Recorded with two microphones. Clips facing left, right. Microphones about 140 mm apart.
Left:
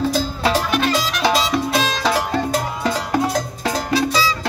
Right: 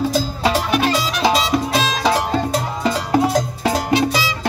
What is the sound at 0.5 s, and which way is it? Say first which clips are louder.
Music: right 1 dB; 5° right (ahead or behind).